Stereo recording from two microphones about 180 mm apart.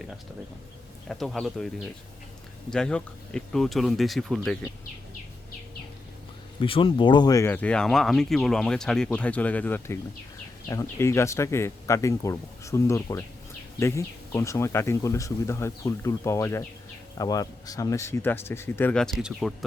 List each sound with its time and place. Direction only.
1.0 s speech: centre (ahead or behind)
6.6 s speech: 30° left (ahead or behind); by 19.5 s centre (ahead or behind)